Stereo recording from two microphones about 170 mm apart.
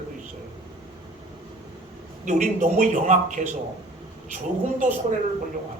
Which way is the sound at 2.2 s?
50° right (ahead or behind).